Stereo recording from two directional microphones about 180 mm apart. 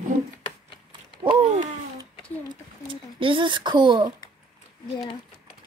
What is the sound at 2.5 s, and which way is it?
Speech, 30° right (ahead or behind).